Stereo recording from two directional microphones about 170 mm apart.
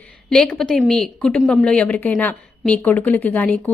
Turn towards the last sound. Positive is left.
turn(degrees=10)  # may be behind; listen again after turning